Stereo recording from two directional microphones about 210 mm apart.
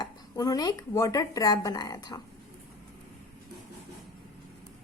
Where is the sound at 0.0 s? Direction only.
15° left (ahead or behind).